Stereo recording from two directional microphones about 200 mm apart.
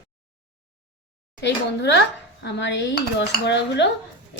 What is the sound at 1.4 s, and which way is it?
Dishes, 60° left (ahead or behind).